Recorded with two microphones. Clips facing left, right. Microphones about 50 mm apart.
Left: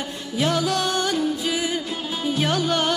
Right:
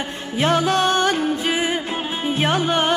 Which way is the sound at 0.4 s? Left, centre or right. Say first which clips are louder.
Right 4 dB; right.